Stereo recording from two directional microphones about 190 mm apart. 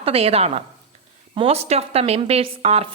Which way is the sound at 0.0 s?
30° right (ahead or behind).